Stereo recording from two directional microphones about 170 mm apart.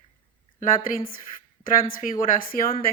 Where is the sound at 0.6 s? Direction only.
55° left (ahead or behind).